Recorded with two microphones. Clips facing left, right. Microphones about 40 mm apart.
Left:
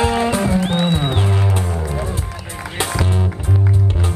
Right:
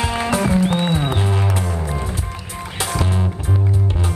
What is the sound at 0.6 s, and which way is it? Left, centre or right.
Music, left.